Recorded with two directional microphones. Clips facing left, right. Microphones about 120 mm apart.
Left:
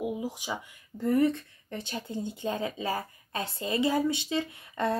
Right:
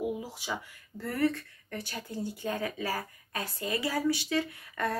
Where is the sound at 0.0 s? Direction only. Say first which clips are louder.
Left 1 dB; 15° left (ahead or behind).